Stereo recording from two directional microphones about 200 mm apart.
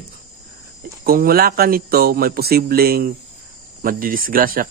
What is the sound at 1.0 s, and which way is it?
Speech, 50° right (ahead or behind).